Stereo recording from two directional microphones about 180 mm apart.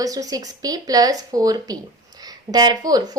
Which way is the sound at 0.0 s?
20° right (ahead or behind).